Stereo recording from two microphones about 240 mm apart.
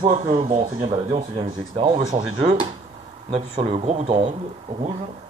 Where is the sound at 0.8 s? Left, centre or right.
Centre.